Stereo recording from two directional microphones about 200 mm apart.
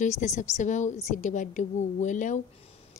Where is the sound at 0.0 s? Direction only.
35° left (ahead or behind).